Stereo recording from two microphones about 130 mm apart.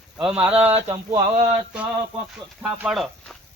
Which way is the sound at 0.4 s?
10° right (ahead or behind).